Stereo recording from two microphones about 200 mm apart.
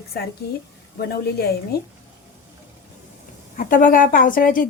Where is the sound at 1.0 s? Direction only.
50° left (ahead or behind).